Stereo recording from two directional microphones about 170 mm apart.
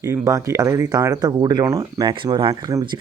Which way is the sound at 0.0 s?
20° right (ahead or behind).